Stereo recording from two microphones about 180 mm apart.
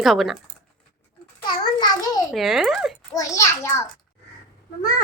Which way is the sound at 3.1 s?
15° left (ahead or behind).